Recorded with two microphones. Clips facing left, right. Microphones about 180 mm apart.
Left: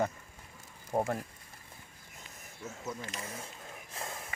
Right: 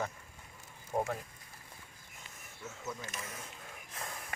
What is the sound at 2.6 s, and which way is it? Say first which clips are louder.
Speech: left 2 dB; 30° left (ahead or behind).